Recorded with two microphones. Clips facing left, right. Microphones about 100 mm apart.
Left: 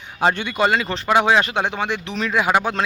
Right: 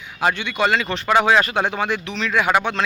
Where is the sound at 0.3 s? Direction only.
35° left (ahead or behind).